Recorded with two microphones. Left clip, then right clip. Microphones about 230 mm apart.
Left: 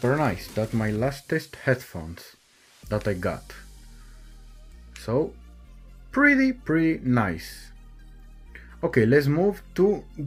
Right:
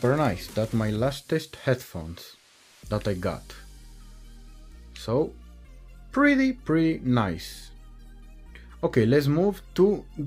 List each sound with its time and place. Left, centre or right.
0.0 s speech: centre
5.0 s speech: centre
8.8 s speech: centre